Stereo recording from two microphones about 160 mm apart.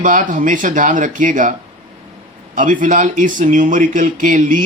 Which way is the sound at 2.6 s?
55° right (ahead or behind).